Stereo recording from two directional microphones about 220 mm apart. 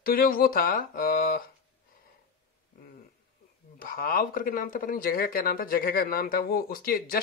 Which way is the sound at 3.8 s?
40° left (ahead or behind).